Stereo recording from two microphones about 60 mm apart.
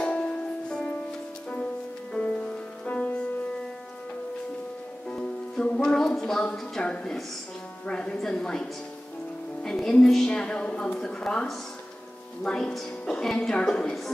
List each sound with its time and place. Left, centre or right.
0.0 s music: centre
2.1 s music: centre
5.1 s music: centre
6.8 s speech: centre
9.6 s music: centre
10.0 s speech: centre